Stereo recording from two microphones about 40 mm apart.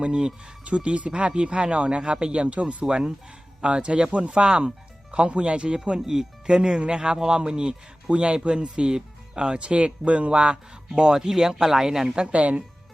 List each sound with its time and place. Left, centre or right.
0.0 s speech: right
2.8 s speech: centre
11.1 s speech: centre
12.0 s a woman's voice: right